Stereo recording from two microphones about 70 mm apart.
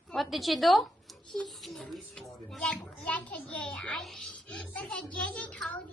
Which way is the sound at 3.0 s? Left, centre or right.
Centre.